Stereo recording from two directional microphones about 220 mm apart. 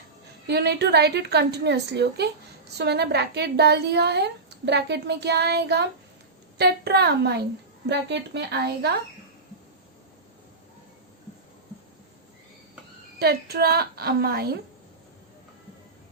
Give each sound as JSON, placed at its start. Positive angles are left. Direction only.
{"t": 0.4, "sound": "a woman's voice", "side_deg": -50}
{"t": 13.1, "sound": "a woman's voice", "side_deg": -45}